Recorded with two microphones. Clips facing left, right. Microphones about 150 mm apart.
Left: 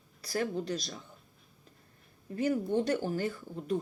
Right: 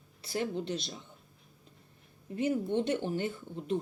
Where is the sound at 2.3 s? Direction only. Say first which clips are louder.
Left 1 dB; 25° right (ahead or behind).